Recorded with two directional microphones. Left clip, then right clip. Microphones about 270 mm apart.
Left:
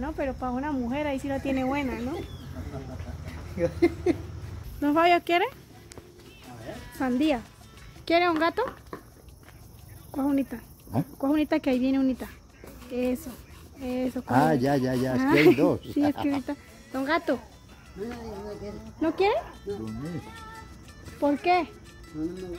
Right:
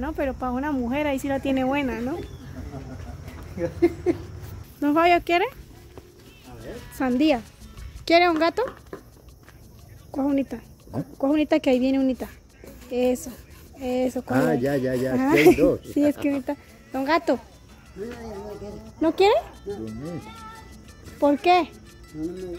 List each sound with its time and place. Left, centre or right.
0.0 s speech: centre
3.5 s a sound: centre
4.7 s speech: centre
7.0 s speech: centre
10.1 s speech: centre
14.4 s speech: left
15.1 s speech: centre
18.9 s speech: centre
19.7 s speech: centre
21.2 s speech: centre
22.2 s speech: centre